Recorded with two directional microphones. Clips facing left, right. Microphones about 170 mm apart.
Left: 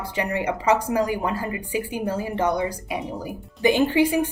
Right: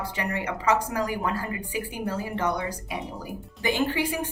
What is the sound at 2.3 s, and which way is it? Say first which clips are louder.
A woman's voice: left 6 dB; 20° left (ahead or behind).